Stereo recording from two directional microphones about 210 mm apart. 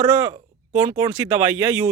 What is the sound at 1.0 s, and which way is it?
Speech, 10° right (ahead or behind).